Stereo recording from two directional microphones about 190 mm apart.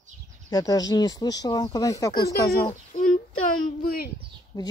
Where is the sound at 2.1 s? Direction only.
55° left (ahead or behind).